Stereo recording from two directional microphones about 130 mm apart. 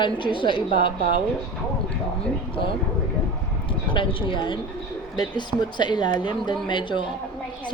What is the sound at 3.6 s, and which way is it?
Speech, 40° left (ahead or behind).